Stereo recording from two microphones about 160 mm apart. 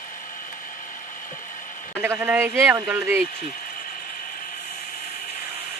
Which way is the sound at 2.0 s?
15° right (ahead or behind).